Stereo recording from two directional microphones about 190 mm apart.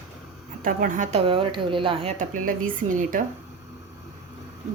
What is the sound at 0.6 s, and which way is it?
Speech, 45° right (ahead or behind).